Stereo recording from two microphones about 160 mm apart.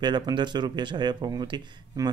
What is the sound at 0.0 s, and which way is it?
Speech, 30° right (ahead or behind).